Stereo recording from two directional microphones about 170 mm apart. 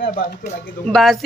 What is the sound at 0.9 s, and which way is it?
Speech, centre (ahead or behind).